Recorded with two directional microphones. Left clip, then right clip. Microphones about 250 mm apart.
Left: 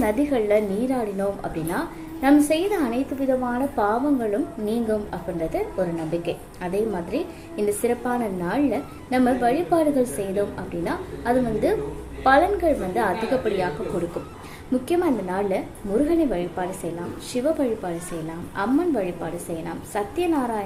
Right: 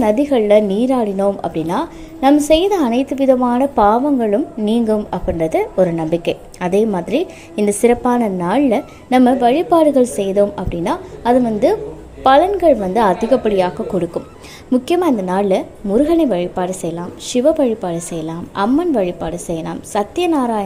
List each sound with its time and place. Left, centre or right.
0.0 s a woman's voice: right
14.8 s a woman's voice: right